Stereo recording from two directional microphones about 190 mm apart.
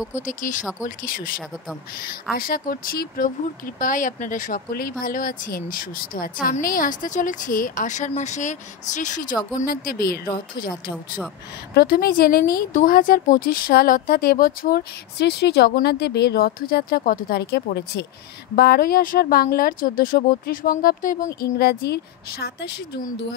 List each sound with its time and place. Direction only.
0.2 s a woman's voice: 45° left (ahead or behind)
2.3 s a woman's voice: 50° left (ahead or behind)
11.7 s a woman's voice: 55° left (ahead or behind)